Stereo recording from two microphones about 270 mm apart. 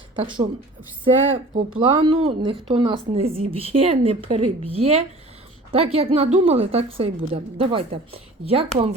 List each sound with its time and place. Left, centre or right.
0.2 s speech: centre